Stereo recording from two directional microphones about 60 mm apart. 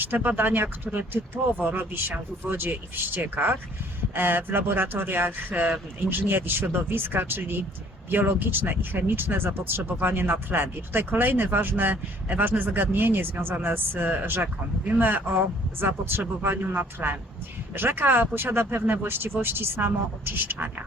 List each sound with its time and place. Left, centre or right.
0.0 s speech: right